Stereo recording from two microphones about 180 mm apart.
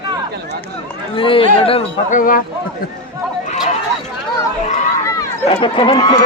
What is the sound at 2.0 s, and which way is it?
Speech, 50° left (ahead or behind).